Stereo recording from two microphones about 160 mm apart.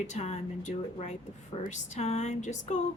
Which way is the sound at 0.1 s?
45° left (ahead or behind).